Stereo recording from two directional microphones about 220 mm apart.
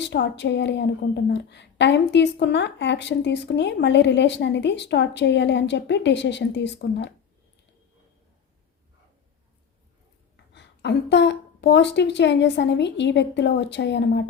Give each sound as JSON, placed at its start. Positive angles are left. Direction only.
{"t": 0.0, "sound": "a woman's voice", "side_deg": 50}
{"t": 10.5, "sound": "a woman's voice", "side_deg": 50}